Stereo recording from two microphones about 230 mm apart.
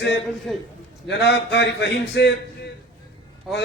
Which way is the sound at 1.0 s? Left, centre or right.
Left.